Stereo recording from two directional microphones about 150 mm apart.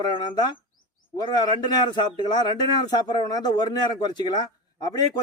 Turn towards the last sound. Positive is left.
turn(degrees=25)  # may be behind; listen again after turning